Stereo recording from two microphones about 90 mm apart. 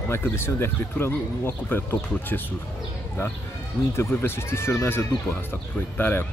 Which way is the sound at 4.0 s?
25° left (ahead or behind).